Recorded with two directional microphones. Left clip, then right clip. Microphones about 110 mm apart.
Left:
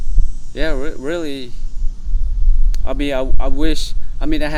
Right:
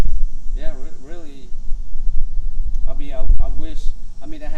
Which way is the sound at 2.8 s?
70° left (ahead or behind).